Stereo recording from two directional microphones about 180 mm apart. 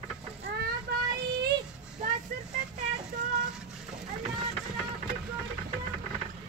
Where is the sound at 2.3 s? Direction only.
45° right (ahead or behind).